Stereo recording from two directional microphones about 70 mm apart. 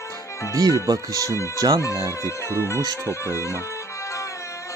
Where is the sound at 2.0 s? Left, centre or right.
Left.